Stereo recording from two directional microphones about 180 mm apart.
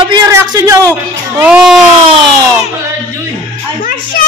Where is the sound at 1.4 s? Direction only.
5° right (ahead or behind).